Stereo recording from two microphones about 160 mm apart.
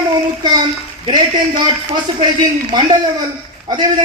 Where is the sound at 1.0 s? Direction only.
30° right (ahead or behind).